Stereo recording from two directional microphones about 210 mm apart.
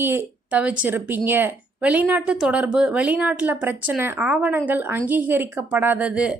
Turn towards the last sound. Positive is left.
turn(degrees=-5)  # may be behind; listen again after turning